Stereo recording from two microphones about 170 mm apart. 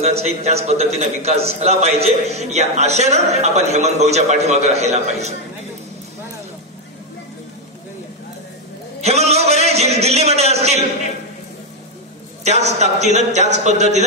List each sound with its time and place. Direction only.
0.0 s a man's voice: 40° right (ahead or behind)
9.0 s a sound: 40° right (ahead or behind)
12.4 s a man's voice: 40° right (ahead or behind)